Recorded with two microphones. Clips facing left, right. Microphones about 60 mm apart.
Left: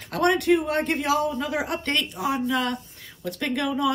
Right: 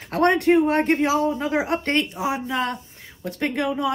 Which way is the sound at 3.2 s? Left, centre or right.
Right.